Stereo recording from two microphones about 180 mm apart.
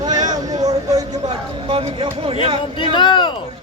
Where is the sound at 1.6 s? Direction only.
30° right (ahead or behind).